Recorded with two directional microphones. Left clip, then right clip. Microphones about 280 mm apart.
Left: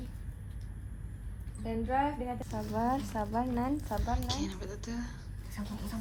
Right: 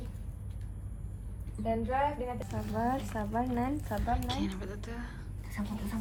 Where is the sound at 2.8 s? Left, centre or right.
Centre.